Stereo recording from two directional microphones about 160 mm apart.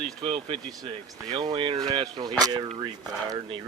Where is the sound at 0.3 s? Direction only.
35° right (ahead or behind).